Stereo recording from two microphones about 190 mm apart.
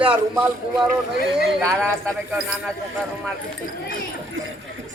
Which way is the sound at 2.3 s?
5° right (ahead or behind).